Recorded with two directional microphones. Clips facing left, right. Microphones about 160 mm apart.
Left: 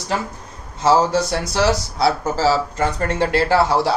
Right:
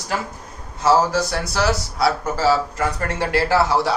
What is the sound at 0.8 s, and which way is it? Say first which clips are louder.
Speech: left 1 dB; 25° left (ahead or behind).